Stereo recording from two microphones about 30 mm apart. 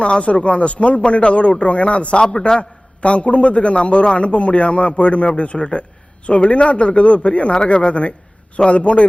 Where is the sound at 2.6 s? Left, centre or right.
Left.